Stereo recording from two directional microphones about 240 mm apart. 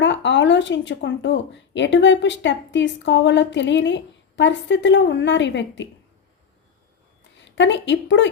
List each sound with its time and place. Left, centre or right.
0.0 s speech: left
7.4 s a woman's voice: left